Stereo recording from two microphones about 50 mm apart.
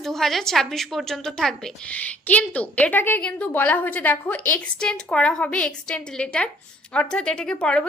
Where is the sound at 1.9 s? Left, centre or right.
Left.